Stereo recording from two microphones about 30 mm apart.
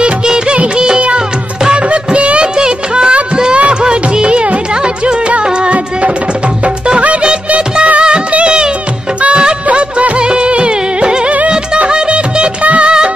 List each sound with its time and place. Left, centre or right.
0.7 s music: right
1.9 s music of bollywood: right
8.3 s music: right
9.7 s music: right
11.9 s music of bollywood: right
12.6 s music of bollywood: right